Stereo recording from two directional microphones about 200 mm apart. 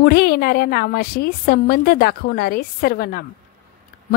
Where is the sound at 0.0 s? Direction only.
50° left (ahead or behind).